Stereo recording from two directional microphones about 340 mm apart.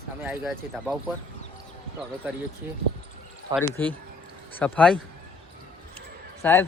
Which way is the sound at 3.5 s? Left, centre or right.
Centre.